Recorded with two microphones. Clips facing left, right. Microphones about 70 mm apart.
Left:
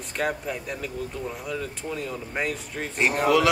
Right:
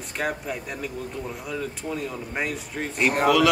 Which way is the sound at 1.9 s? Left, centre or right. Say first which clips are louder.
Left 1 dB; centre.